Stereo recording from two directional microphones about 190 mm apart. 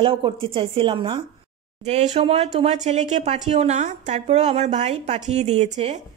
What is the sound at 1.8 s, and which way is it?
A woman's voice, 35° right (ahead or behind).